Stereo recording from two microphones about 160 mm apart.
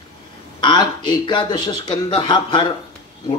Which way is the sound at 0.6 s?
30° left (ahead or behind).